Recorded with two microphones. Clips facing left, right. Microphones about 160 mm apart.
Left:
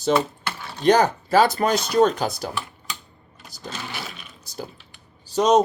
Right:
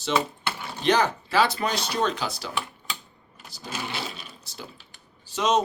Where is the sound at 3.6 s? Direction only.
10° right (ahead or behind).